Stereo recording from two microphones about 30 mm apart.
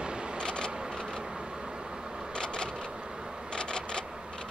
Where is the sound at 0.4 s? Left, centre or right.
Left.